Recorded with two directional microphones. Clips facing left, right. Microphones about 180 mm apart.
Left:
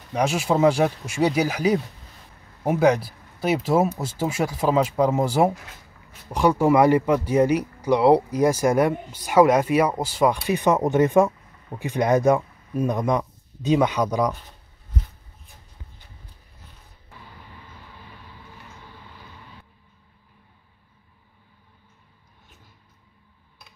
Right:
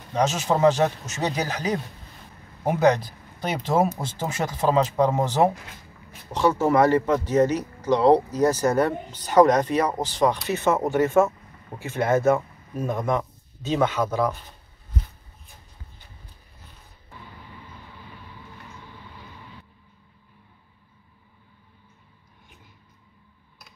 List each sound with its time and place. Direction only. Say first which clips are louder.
0.1 s speech: left 1 dB; 10° left (ahead or behind)